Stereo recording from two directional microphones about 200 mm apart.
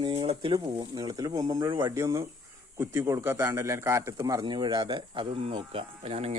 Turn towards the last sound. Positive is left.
turn(degrees=-30)  # may be behind; listen again after turning